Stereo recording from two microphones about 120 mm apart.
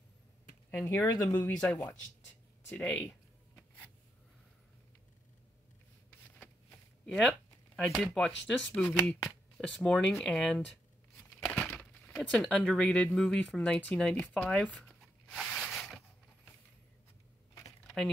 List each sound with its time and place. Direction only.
0.7 s speech: 20° left (ahead or behind)
2.7 s a sound: 10° left (ahead or behind)
7.1 s speech: 5° left (ahead or behind)